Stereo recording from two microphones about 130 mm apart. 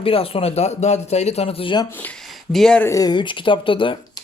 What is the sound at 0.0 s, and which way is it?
A man's voice, 45° left (ahead or behind).